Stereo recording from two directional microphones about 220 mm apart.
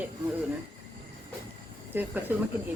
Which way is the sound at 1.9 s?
10° right (ahead or behind).